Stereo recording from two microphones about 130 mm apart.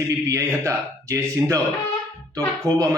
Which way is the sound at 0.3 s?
25° right (ahead or behind).